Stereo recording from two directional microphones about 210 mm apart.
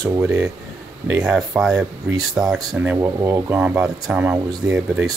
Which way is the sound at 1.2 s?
5° right (ahead or behind).